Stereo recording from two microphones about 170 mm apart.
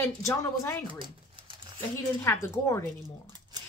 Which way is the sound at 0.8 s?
30° right (ahead or behind).